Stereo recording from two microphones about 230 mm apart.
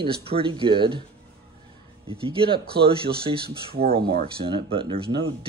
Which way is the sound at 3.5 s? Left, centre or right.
Right.